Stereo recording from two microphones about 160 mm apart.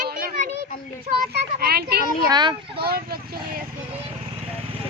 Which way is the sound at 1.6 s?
75° right (ahead or behind).